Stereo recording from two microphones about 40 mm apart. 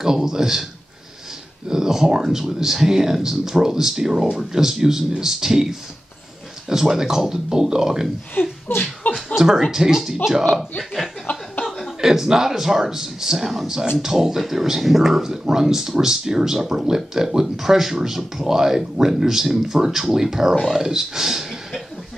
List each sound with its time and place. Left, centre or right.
0.0 s speech: centre
1.7 s speech: centre
8.4 s speech: left
9.0 s a sound: left
9.7 s speech: centre
11.3 s a sound: left
12.0 s speech: centre